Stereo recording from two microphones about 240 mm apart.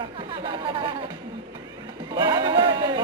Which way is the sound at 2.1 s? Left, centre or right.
Centre.